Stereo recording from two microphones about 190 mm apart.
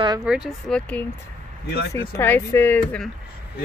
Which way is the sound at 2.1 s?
10° left (ahead or behind).